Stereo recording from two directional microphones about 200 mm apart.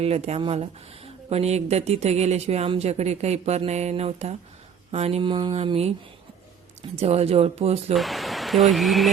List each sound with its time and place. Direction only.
0.0 s speech: 30° right (ahead or behind)
4.9 s mantra: 30° right (ahead or behind)
6.9 s speech: 30° right (ahead or behind)
7.9 s speech: centre (ahead or behind)